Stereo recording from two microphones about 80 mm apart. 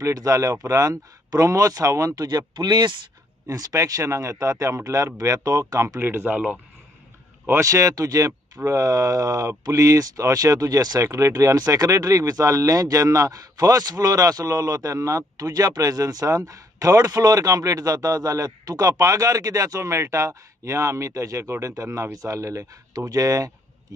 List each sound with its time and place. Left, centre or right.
0.0 s speech: right
2.5 s speech: right
3.4 s speech: right
5.9 s speech: right
7.6 s speech: right
22.9 s speech: right